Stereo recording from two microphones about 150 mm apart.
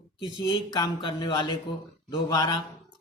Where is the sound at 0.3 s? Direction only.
30° left (ahead or behind).